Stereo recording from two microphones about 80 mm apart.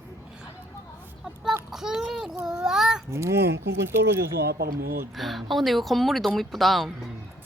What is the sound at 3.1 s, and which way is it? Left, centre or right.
Speech, right.